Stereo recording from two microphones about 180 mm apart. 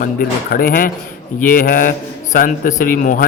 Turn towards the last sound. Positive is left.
turn(degrees=50)  # may be behind; listen again after turning